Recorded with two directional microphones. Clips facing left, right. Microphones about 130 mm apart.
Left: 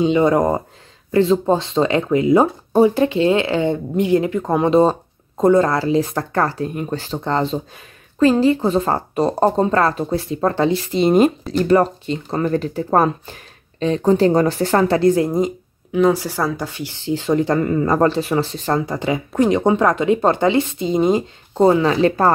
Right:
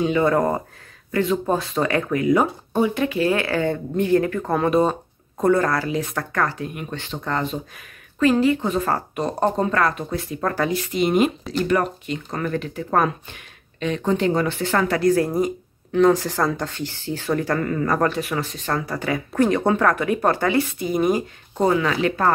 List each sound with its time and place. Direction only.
0.0 s speech: 20° left (ahead or behind)
2.7 s speech: 35° left (ahead or behind); by 15.5 s 20° left (ahead or behind)
15.9 s speech: 10° left (ahead or behind); by 22.3 s 35° left (ahead or behind)